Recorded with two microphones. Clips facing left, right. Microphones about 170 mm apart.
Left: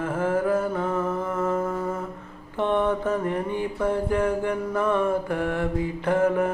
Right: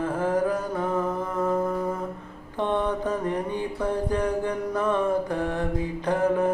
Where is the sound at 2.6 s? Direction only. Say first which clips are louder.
Left 2 dB; 15° right (ahead or behind).